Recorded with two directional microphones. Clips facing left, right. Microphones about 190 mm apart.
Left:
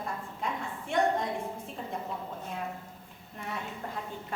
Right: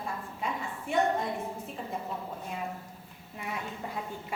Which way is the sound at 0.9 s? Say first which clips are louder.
Even; 5° right (ahead or behind).